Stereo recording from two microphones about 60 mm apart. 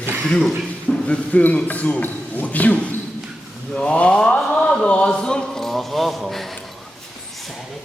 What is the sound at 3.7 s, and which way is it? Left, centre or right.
Chant, left.